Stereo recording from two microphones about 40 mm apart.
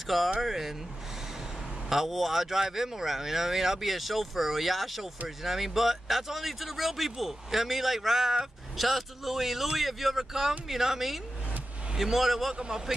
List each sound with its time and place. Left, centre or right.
0.0 s speech: centre
1.9 s speech: centre
12.5 s speech: centre